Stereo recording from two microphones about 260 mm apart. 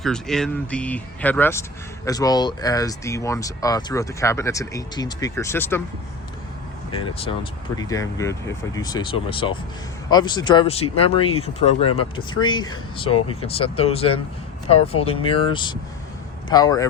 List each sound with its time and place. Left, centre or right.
0.0 s speech: centre
6.9 s speech: centre